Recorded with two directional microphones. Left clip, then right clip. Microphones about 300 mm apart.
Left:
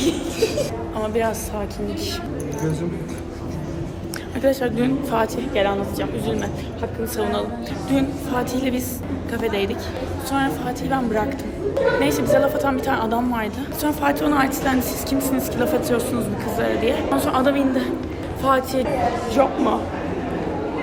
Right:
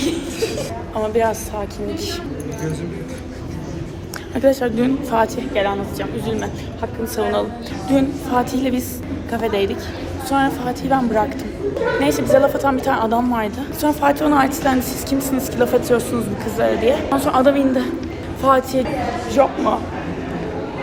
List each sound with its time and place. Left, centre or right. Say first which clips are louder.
0.0 s a sound: left 1 dB; centre
0.9 s a woman's voice: right 5 dB; centre
4.4 s a woman's voice: right 4 dB; centre